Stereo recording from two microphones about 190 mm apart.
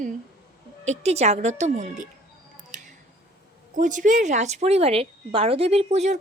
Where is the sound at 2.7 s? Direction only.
40° right (ahead or behind).